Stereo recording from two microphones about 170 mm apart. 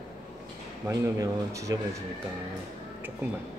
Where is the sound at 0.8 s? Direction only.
15° right (ahead or behind).